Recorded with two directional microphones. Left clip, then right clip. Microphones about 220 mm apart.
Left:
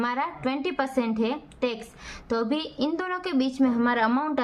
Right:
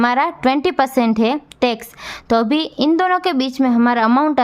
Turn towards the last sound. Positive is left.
turn(degrees=-45)  # may be behind; listen again after turning